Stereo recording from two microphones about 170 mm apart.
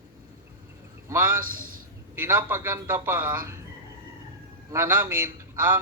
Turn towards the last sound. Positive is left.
turn(degrees=-15)  # may be behind; listen again after turning